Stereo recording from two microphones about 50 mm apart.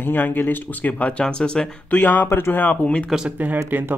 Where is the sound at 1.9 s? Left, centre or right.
Left.